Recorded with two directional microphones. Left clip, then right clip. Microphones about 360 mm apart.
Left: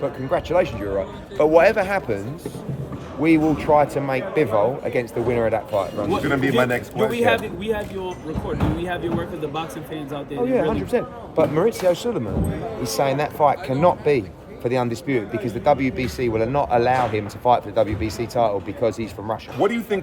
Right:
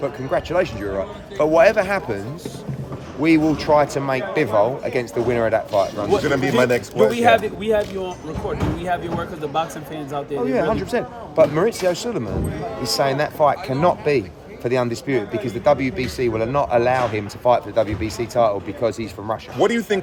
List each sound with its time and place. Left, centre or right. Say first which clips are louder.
0.0 s speech: right 1 dB; centre
3.2 s speech: right 1 dB; centre
6.1 s speech: right 2 dB; right
10.4 s speech: even; centre
19.5 s speech: right 3 dB; right